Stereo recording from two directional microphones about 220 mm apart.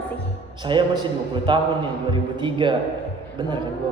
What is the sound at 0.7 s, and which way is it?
A man's voice, 20° right (ahead or behind).